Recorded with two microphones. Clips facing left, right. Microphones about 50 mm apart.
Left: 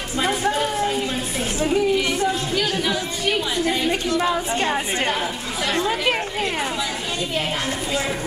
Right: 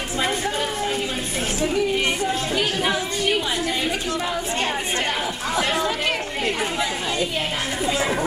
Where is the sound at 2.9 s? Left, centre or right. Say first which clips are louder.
Right 1 dB; centre.